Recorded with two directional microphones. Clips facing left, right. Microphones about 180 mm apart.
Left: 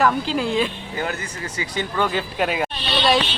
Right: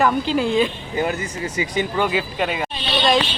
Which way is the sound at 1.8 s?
10° right (ahead or behind).